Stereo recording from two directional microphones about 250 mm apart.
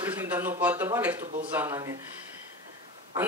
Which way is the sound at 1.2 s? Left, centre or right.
Right.